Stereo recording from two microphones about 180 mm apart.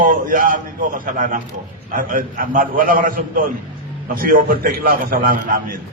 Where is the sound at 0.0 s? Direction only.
50° right (ahead or behind).